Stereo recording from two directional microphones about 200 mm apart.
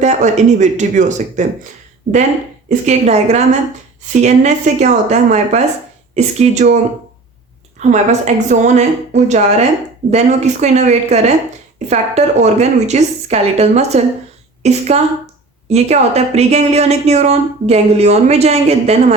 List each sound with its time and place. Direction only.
0.0 s speech: 35° right (ahead or behind)
2.6 s speech: 35° right (ahead or behind)
7.8 s a woman's voice: 35° right (ahead or behind)